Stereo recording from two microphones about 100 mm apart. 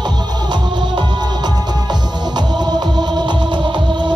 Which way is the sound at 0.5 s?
45° right (ahead or behind).